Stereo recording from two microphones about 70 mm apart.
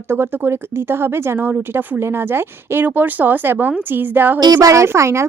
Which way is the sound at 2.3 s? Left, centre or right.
Right.